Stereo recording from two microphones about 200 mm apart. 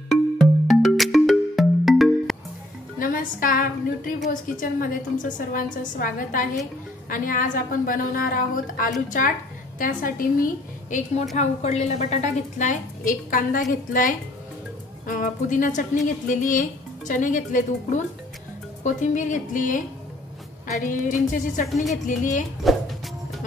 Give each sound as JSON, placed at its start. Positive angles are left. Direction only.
{"t": 0.1, "sound": "music", "side_deg": 0}
{"t": 3.0, "sound": "a woman's voice", "side_deg": 45}
{"t": 21.6, "sound": "speech", "side_deg": 0}
{"t": 21.9, "sound": "a woman's voice", "side_deg": 40}
{"t": 22.6, "sound": "music", "side_deg": 0}